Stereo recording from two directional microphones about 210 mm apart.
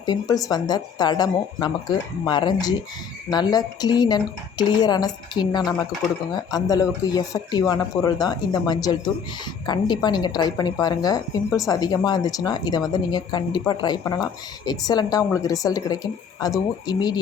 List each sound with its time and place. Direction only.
0.0 s a woman's voice: 20° left (ahead or behind)